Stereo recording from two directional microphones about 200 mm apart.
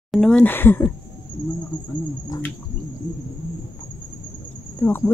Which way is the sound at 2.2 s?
15° left (ahead or behind).